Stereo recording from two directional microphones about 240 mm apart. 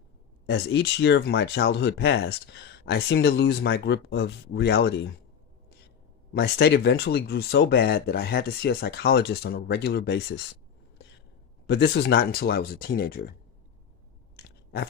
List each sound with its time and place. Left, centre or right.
0.4 s speech: left
6.3 s speech: left
11.6 s speech: left
14.3 s biting: left